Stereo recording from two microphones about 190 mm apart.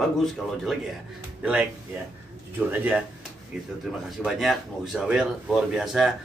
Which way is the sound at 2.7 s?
10° right (ahead or behind).